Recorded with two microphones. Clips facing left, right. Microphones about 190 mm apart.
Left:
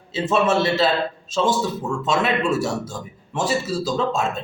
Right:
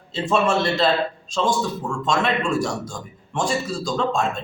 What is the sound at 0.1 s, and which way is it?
A man's voice, 5° left (ahead or behind).